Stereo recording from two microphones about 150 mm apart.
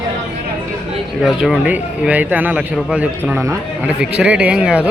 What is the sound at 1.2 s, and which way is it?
A man's voice, 5° right (ahead or behind).